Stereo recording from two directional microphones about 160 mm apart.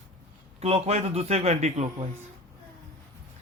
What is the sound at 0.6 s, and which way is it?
Speech, 40° right (ahead or behind).